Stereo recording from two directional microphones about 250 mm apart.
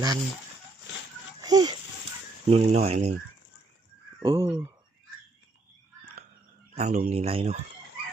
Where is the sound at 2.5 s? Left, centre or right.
Right.